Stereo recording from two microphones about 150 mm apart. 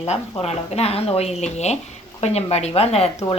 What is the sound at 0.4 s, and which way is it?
Speech, 45° left (ahead or behind).